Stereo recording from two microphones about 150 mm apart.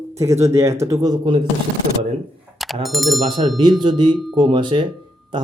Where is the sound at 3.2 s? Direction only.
30° right (ahead or behind).